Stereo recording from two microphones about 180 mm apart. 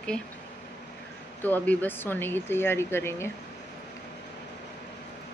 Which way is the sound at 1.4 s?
10° left (ahead or behind).